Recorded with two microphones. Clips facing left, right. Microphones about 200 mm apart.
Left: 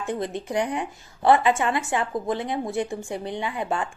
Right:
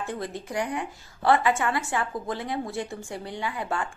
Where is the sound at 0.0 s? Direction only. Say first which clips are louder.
Left 4 dB; 20° left (ahead or behind).